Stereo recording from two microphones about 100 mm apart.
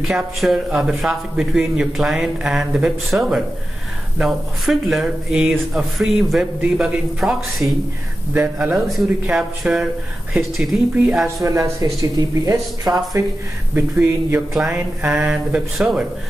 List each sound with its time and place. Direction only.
0.1 s a man's voice: 5° right (ahead or behind)
8.3 s a man's voice: 15° right (ahead or behind)
8.8 s a man's voice: 5° right (ahead or behind)
11.4 s speech: 35° right (ahead or behind)
13.7 s a man's voice: 20° right (ahead or behind)